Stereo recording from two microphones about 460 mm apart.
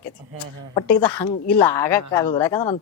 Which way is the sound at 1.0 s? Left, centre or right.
Left.